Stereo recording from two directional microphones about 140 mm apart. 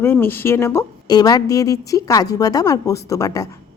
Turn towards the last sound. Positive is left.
turn(degrees=25)  # may be behind; listen again after turning